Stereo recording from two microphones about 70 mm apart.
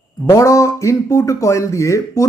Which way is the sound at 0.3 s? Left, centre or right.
Left.